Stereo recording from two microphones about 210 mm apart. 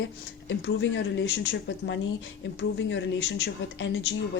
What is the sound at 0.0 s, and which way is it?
Speech, 60° left (ahead or behind).